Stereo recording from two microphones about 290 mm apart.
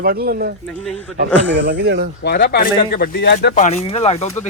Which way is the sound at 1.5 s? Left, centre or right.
Right.